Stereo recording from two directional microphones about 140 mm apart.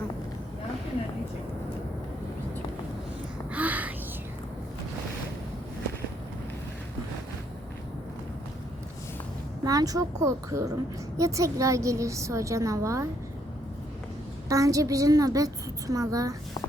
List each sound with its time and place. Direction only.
3.5 s a sound: 10° right (ahead or behind)
9.6 s a woman's voice: 25° right (ahead or behind)
14.5 s a woman's voice: 25° right (ahead or behind)